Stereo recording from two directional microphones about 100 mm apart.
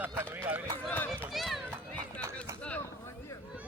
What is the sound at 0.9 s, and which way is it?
Run, 20° left (ahead or behind).